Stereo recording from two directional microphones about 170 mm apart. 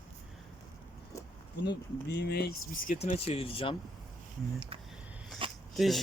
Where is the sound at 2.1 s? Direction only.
75° left (ahead or behind).